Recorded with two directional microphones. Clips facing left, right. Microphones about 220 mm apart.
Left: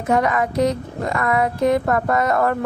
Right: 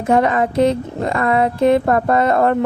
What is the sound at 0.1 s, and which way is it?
A woman's voice, 30° right (ahead or behind).